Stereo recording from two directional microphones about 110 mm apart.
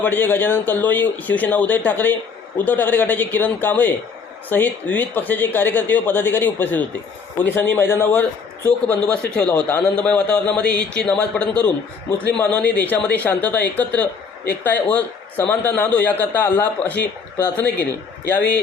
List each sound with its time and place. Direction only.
0.0 s a man's voice: 15° left (ahead or behind)